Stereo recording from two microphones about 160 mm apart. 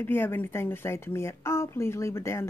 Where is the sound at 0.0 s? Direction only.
15° left (ahead or behind).